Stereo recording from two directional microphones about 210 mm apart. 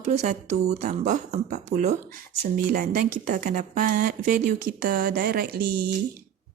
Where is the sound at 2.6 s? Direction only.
45° right (ahead or behind).